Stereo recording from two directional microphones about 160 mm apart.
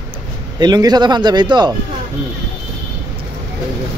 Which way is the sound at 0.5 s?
25° right (ahead or behind).